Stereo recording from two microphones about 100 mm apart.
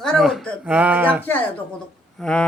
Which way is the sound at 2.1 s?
10° left (ahead or behind).